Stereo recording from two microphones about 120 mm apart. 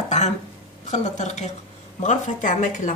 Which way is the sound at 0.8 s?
80° left.